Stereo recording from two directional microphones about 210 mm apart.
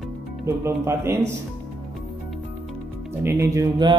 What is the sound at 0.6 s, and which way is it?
Mantra, 10° right (ahead or behind).